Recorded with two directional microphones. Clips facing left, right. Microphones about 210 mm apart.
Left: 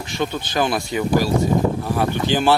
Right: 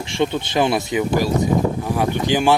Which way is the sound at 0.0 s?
25° right (ahead or behind).